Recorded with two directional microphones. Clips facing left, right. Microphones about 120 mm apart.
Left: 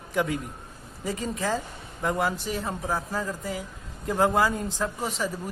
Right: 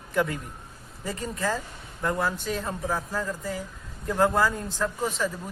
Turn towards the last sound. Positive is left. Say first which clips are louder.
# right 1 dB
turn(degrees=10)  # may be behind; listen again after turning